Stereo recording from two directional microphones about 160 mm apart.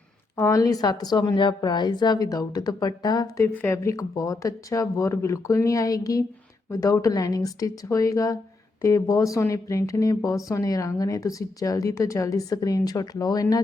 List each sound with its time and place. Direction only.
0.3 s a woman's voice: 20° left (ahead or behind)